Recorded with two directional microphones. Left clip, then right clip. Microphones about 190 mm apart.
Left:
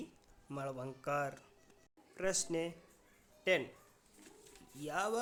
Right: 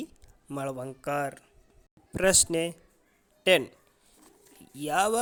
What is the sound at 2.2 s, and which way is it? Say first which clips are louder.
Speech: right 12 dB; 45° right (ahead or behind).